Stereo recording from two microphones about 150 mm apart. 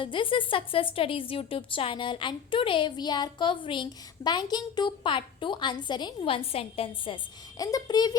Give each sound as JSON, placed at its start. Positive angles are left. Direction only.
{"t": 0.0, "sound": "a woman's voice", "side_deg": 35}
{"t": 7.6, "sound": "a child's voice", "side_deg": 25}